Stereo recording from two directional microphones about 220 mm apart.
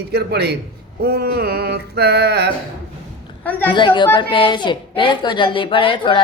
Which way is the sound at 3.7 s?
20° left (ahead or behind).